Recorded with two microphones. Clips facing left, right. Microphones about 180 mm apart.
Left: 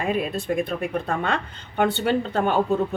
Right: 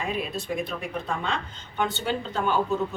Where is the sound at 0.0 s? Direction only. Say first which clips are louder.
Left 5 dB; 55° left (ahead or behind).